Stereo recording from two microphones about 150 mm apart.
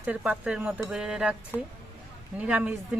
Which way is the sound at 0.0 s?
10° right (ahead or behind).